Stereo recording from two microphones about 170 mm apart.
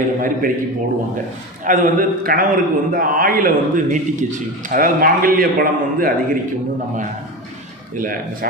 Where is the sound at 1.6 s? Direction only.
50° right (ahead or behind).